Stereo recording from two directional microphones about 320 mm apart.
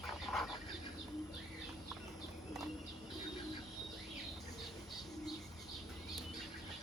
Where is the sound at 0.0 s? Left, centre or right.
Centre.